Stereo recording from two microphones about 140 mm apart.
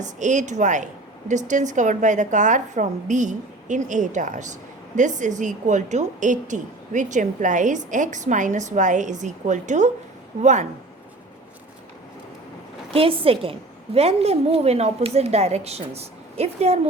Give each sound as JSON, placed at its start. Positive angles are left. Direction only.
{"t": 0.0, "sound": "a woman's voice", "side_deg": -60}
{"t": 12.9, "sound": "a woman's voice", "side_deg": -40}